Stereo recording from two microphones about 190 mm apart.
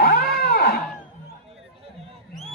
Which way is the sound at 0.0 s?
55° left (ahead or behind).